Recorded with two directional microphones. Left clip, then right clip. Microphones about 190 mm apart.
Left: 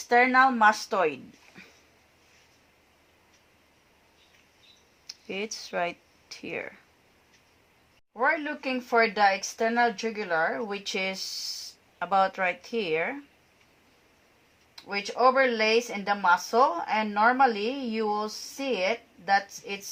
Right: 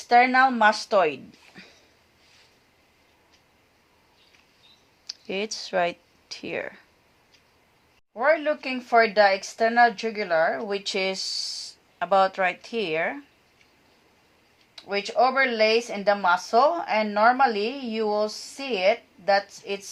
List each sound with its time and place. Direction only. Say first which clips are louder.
0.1 s a woman's voice: right 3 dB; 40° right (ahead or behind)
5.0 s speech: right 4 dB; 40° right (ahead or behind)
8.1 s a woman's voice: right 5 dB; 40° right (ahead or behind)
14.8 s a woman's voice: right 4 dB; 40° right (ahead or behind)